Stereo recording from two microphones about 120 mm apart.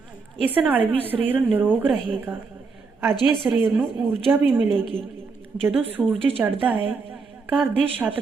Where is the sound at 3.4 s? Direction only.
10° right (ahead or behind).